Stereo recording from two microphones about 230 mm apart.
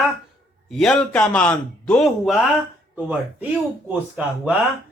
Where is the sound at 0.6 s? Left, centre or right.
Centre.